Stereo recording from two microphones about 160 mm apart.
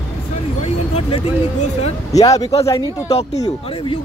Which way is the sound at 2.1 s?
20° left (ahead or behind).